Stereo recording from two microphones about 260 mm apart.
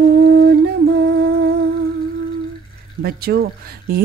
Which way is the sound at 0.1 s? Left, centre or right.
Right.